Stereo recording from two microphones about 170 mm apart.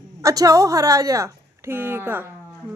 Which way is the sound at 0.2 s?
20° right (ahead or behind).